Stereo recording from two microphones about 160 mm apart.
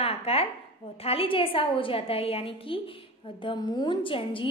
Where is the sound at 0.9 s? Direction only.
35° left (ahead or behind).